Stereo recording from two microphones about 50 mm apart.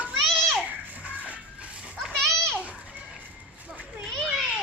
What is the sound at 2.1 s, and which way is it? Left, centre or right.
Children playing, centre.